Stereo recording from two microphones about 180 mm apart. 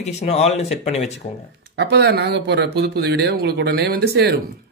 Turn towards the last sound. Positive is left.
turn(degrees=-65)  # may be behind; listen again after turning